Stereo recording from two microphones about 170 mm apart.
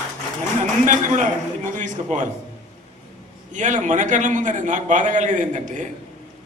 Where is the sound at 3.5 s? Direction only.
45° right (ahead or behind).